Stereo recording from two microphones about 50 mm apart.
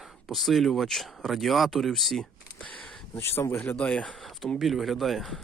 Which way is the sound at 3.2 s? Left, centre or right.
Left.